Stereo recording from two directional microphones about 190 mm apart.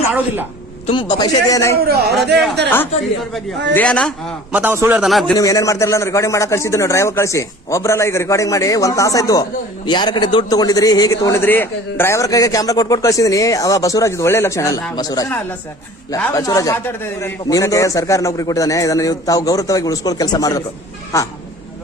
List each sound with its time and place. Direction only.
0.9 s a man's voice: 25° left (ahead or behind)
1.8 s a man's voice: 55° right (ahead or behind)
3.8 s speech: 5° left (ahead or behind)
4.5 s a man's voice: 10° right (ahead or behind)
5.4 s a man's voice: 20° left (ahead or behind)